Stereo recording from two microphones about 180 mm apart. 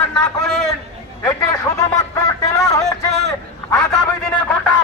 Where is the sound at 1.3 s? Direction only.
15° left (ahead or behind).